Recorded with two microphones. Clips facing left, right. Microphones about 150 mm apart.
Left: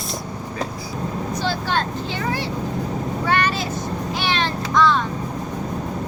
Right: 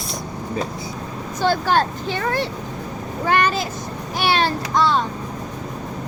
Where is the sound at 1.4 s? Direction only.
45° right (ahead or behind).